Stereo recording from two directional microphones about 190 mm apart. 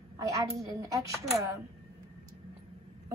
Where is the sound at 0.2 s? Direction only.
15° right (ahead or behind).